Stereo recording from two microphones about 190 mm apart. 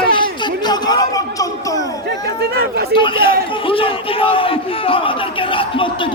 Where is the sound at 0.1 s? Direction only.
25° left (ahead or behind).